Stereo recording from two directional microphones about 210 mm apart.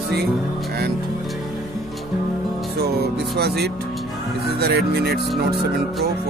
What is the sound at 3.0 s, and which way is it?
Speech, 50° right (ahead or behind).